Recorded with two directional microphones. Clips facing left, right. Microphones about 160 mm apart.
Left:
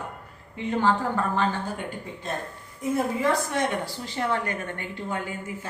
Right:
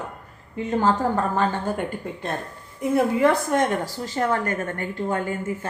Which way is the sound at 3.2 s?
55° right (ahead or behind).